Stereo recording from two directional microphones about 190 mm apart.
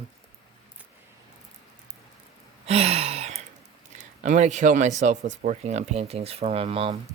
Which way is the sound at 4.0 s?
40° right (ahead or behind).